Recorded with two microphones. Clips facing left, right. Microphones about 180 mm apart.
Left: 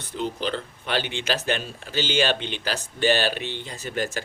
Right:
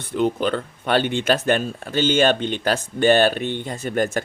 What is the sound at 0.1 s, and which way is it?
Speech, 60° right (ahead or behind).